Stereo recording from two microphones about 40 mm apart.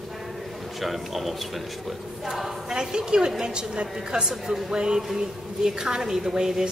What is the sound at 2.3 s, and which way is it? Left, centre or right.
A woman's voice, centre.